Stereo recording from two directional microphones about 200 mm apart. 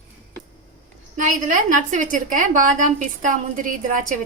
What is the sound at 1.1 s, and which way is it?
A woman's voice, 40° right (ahead or behind).